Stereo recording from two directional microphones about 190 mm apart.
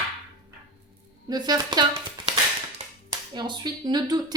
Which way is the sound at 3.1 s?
25° right (ahead or behind).